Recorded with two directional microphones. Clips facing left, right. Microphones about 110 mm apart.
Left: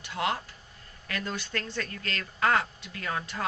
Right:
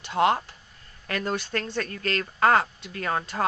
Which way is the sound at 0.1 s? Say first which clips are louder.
Right 8 dB; 30° right (ahead or behind).